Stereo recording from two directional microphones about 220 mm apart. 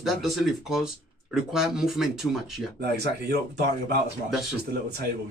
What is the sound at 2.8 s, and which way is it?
Speech, 50° right (ahead or behind).